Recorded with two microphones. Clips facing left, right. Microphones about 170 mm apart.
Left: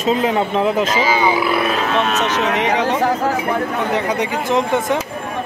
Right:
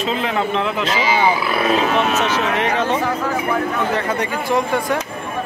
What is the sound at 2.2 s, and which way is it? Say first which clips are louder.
Speech: left 1 dB; 15° left (ahead or behind).